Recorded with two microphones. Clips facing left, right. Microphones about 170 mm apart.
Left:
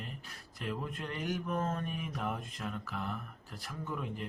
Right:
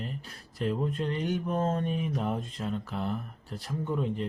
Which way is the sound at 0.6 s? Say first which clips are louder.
Right 9 dB; 30° right (ahead or behind).